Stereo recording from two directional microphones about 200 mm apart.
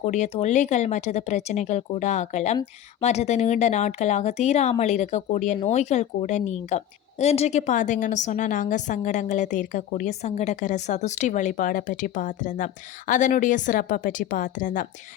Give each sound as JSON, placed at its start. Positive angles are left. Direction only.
{"t": 0.0, "sound": "a woman's voice", "side_deg": 35}